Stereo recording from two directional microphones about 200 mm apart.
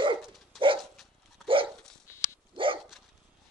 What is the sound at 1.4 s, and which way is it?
Dog, 25° right (ahead or behind).